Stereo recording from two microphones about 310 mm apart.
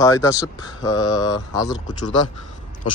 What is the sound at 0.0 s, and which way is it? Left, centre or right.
A man's voice, centre.